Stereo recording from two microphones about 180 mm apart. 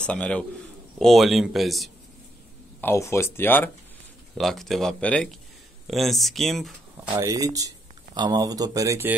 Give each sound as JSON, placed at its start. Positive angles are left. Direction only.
{"t": 0.0, "sound": "speech", "side_deg": 5}
{"t": 2.8, "sound": "speech", "side_deg": 15}
{"t": 4.4, "sound": "speech", "side_deg": 0}
{"t": 7.2, "sound": "speech", "side_deg": -20}